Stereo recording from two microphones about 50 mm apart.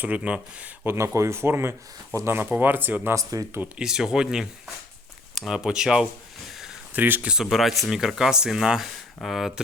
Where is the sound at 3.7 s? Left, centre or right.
Centre.